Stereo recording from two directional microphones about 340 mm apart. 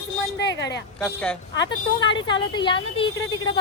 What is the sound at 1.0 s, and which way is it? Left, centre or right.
A woman's voice, centre.